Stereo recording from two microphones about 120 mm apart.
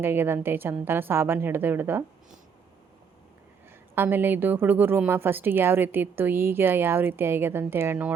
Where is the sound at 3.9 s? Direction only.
15° right (ahead or behind).